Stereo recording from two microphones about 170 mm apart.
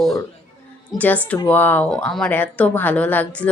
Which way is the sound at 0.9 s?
10° left (ahead or behind).